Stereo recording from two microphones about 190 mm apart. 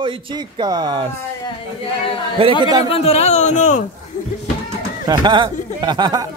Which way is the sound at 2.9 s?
30° left (ahead or behind).